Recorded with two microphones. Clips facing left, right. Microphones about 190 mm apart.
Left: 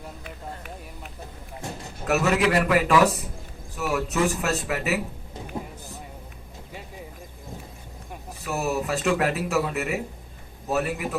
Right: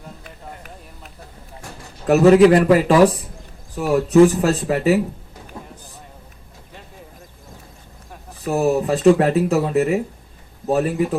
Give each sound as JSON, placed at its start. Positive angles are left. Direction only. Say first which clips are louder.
{"t": 1.6, "sound": "a sound", "louder": "left 4 dB", "side_deg": 25}
{"t": 2.0, "sound": "speech", "louder": "right 11 dB", "side_deg": -30}
{"t": 5.5, "sound": "vehicle", "louder": "left 4 dB", "side_deg": 20}
{"t": 8.4, "sound": "speech", "louder": "right 8 dB", "side_deg": -35}